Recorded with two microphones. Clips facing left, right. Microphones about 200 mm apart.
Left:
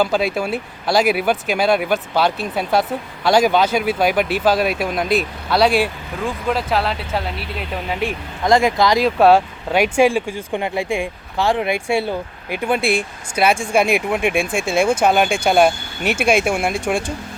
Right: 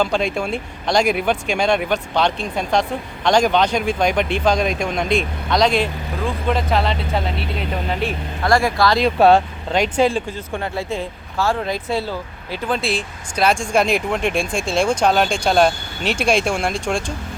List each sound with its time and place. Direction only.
0.0 s speech: 5° left (ahead or behind)
9.0 s speech: centre (ahead or behind)